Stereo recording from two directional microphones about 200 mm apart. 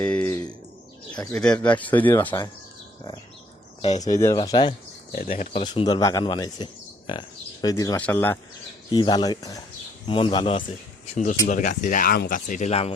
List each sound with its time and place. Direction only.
0.0 s bird: 5° left (ahead or behind)
1.1 s speech: 20° left (ahead or behind)
3.8 s speech: 35° left (ahead or behind)
4.0 s speech: 15° left (ahead or behind)
5.1 s speech: 45° left (ahead or behind)
5.5 s speech: 25° left (ahead or behind)
8.9 s speech: 20° left (ahead or behind)